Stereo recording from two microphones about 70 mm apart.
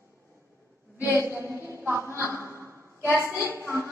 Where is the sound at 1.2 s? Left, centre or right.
Right.